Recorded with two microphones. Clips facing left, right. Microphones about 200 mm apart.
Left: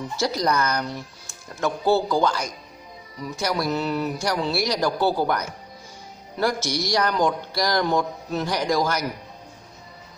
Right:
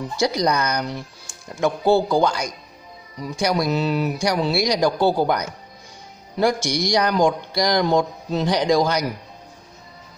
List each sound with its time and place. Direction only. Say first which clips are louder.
0.2 s a man's voice: right 3 dB; 15° right (ahead or behind)